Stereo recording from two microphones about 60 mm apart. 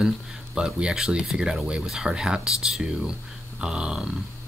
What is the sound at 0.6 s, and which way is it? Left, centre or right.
Speech, centre.